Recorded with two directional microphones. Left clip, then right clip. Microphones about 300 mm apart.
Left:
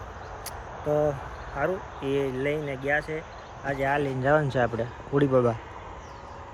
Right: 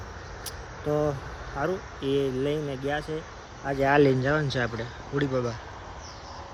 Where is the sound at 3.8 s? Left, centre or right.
Right.